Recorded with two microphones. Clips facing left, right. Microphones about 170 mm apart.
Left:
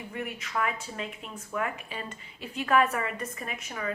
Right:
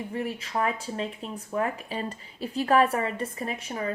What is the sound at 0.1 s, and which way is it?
Speech, 30° right (ahead or behind).